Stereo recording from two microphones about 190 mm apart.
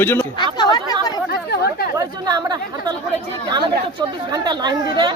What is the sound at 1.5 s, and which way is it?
Speech, 55° left (ahead or behind).